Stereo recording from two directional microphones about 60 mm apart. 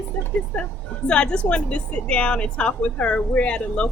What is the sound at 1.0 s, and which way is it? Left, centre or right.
Speech, centre.